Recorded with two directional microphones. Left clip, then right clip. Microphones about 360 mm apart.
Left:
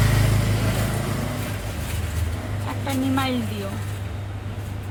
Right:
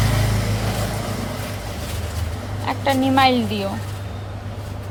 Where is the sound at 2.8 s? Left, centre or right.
Centre.